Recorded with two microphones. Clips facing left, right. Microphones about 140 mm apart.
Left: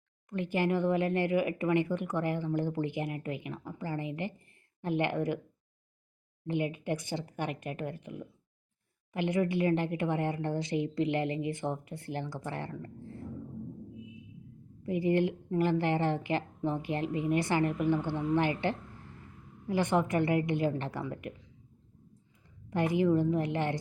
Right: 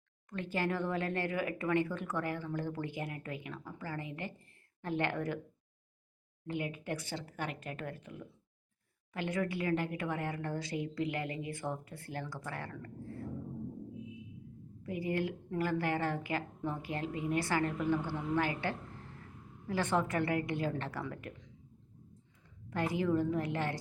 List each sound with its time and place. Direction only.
0.3 s speech: 15° left (ahead or behind)
6.5 s speech: 20° left (ahead or behind)
14.8 s speech: 20° left (ahead or behind)
22.7 s speech: 20° left (ahead or behind)